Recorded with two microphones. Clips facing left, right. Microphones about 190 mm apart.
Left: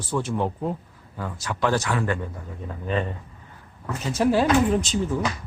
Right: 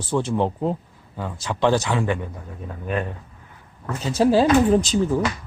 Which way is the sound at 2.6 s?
5° right (ahead or behind).